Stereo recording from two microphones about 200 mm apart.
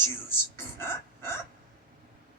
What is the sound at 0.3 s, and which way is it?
Speech, 10° left (ahead or behind).